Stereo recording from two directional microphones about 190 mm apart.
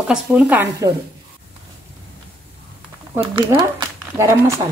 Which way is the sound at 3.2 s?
25° right (ahead or behind).